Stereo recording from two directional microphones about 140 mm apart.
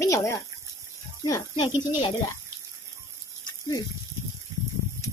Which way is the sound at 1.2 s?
30° left (ahead or behind).